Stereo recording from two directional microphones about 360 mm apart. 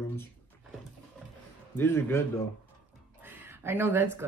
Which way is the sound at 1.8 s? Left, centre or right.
Centre.